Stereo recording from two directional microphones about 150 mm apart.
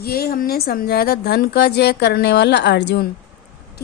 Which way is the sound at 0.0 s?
90° left.